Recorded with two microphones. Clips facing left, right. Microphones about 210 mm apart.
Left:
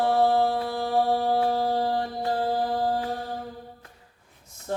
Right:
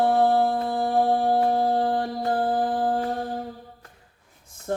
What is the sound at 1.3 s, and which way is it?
Music, 50° right (ahead or behind).